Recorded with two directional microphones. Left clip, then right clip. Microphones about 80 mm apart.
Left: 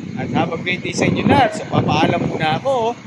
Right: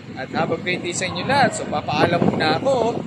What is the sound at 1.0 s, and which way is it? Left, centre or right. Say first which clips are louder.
Speech: left 4 dB; centre.